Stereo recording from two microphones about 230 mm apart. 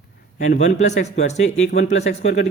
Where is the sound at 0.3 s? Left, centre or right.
Left.